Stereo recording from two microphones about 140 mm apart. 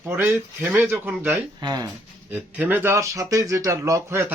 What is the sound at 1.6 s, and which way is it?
Speech, 30° right (ahead or behind).